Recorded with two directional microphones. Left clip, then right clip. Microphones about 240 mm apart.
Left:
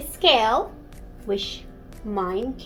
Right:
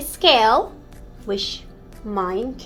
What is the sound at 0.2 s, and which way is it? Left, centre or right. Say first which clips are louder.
A woman's voice: right 4 dB; right.